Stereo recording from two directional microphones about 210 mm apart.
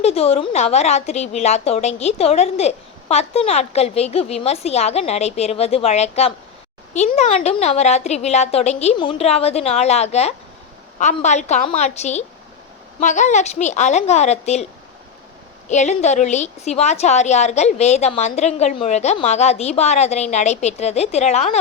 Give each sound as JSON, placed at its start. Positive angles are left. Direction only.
{"t": 0.0, "sound": "speech", "side_deg": 30}
{"t": 15.7, "sound": "speech", "side_deg": 35}